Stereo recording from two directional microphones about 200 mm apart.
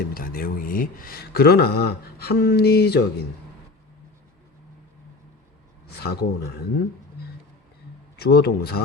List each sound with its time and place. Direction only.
0.0 s speech: 50° left (ahead or behind)
6.0 s speech: 55° left (ahead or behind)
8.1 s speech: 55° left (ahead or behind)